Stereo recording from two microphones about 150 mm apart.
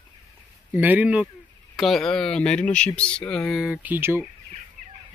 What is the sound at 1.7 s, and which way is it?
Speech, centre (ahead or behind).